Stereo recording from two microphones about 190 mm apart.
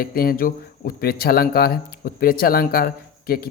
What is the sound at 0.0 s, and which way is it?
Speech, 50° left (ahead or behind).